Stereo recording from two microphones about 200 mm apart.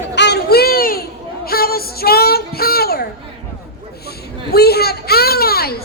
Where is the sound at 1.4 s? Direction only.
50° left (ahead or behind).